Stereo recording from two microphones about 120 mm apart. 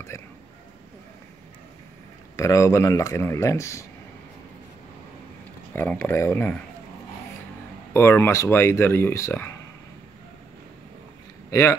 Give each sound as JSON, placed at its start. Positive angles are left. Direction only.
{"t": 0.1, "sound": "speech", "side_deg": 25}
{"t": 2.3, "sound": "speech", "side_deg": 25}
{"t": 5.7, "sound": "speech", "side_deg": 15}
{"t": 7.9, "sound": "speech", "side_deg": 20}